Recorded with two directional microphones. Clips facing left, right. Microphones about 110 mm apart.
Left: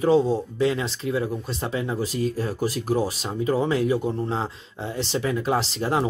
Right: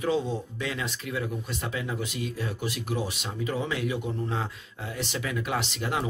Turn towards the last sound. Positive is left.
turn(degrees=30)  # may be behind; listen again after turning